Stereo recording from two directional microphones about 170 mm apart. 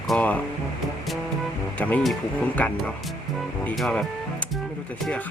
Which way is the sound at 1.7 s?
10° left (ahead or behind).